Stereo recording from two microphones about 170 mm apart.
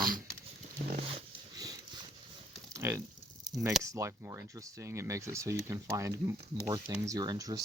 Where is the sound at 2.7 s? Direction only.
15° right (ahead or behind).